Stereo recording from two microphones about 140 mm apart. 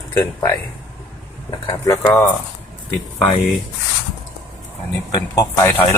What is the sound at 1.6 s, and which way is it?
Speech, 25° left (ahead or behind).